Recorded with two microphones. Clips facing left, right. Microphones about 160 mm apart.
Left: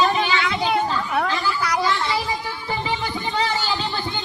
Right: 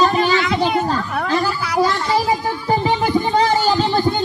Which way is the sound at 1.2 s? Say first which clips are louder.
Right 4 dB; 40° right (ahead or behind).